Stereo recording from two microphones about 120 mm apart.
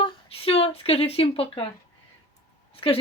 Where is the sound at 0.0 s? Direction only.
55° left (ahead or behind).